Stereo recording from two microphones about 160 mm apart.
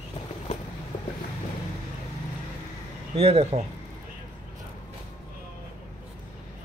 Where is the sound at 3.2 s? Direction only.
40° right (ahead or behind).